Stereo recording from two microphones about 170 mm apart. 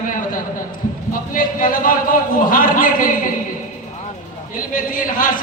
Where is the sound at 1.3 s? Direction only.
55° left (ahead or behind).